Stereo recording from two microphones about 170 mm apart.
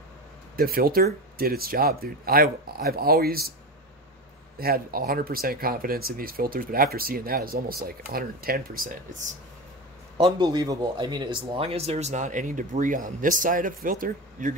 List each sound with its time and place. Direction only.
0.6 s speech: 60° right (ahead or behind)
4.6 s speech: 60° right (ahead or behind)
10.1 s speech: 30° right (ahead or behind); by 14.5 s 55° right (ahead or behind)